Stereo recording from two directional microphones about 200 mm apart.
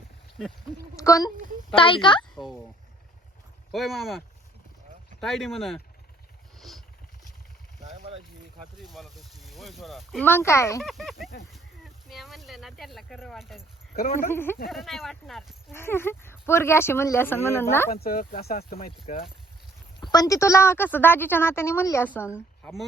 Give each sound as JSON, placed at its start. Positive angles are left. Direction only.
{"t": 0.9, "sound": "a woman's voice", "side_deg": 15}
{"t": 1.7, "sound": "speech", "side_deg": 25}
{"t": 2.3, "sound": "speech", "side_deg": 0}
{"t": 3.7, "sound": "speech", "side_deg": 0}
{"t": 5.2, "sound": "speech", "side_deg": 0}
{"t": 6.6, "sound": "vehicle", "side_deg": 0}
{"t": 8.8, "sound": "speech", "side_deg": 0}
{"t": 10.2, "sound": "a woman's voice", "side_deg": 10}
{"t": 10.8, "sound": "speech", "side_deg": 0}
{"t": 13.9, "sound": "speech", "side_deg": 45}
{"t": 14.3, "sound": "a woman's voice", "side_deg": 10}
{"t": 15.7, "sound": "a woman's voice", "side_deg": 10}
{"t": 17.9, "sound": "speech", "side_deg": 50}
{"t": 20.0, "sound": "a woman's voice", "side_deg": 20}